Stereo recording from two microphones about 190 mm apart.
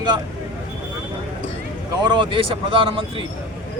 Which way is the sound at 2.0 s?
25° right (ahead or behind).